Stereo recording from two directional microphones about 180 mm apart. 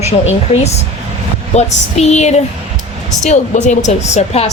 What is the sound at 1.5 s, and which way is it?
Speech, 40° left (ahead or behind).